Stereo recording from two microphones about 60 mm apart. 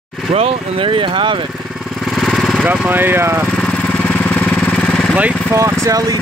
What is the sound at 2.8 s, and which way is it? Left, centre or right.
Speech, right.